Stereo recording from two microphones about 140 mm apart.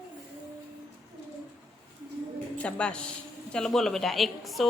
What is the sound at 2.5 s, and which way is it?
A man's voice, 10° left (ahead or behind).